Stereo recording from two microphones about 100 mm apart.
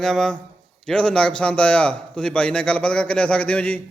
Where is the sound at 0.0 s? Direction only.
5° left (ahead or behind).